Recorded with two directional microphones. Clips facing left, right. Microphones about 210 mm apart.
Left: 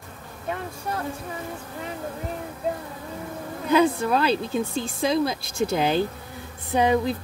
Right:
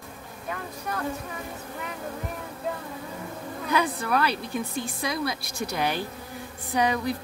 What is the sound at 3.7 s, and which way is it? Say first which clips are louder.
A woman's voice: left 6 dB; 25° left (ahead or behind).